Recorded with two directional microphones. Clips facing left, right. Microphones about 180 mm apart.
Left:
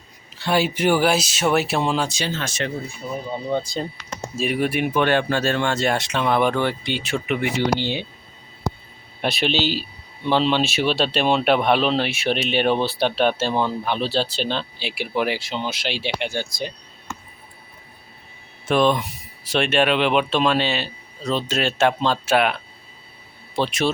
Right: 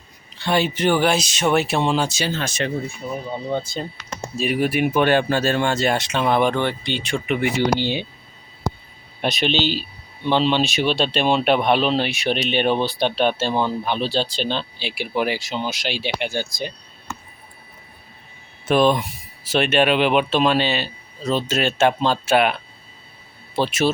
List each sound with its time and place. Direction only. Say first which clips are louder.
0.3 s speech: even; 5° left (ahead or behind)
2.4 s speech: right 2 dB; 15° right (ahead or behind)
3.0 s speech: left 4 dB; centre (ahead or behind)
9.2 s speech: right 1 dB; 5° left (ahead or behind)
18.7 s speech: right 2 dB; 5° right (ahead or behind)
23.6 s speech: right 2 dB; 5° right (ahead or behind)